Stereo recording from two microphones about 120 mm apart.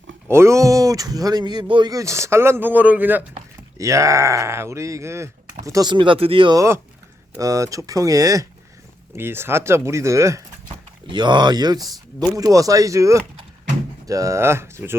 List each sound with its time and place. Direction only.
0.3 s speech: 25° right (ahead or behind)
3.8 s speech: 25° right (ahead or behind)
5.9 s speech: 45° right (ahead or behind)
6.6 s speech: 20° right (ahead or behind)
11.0 s speech: 40° right (ahead or behind); by 14.9 s 20° right (ahead or behind)